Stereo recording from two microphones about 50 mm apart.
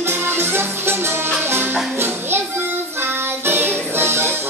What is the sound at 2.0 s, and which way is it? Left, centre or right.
Children playing, right.